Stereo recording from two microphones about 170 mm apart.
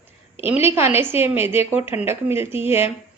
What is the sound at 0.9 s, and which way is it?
A woman's voice, 15° right (ahead or behind).